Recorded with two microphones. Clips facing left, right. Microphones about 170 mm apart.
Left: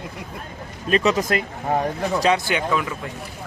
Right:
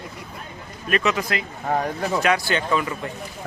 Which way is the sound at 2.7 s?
Centre (ahead or behind).